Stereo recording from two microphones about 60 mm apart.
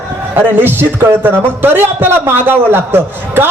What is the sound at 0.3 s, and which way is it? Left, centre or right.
A man's voice, right.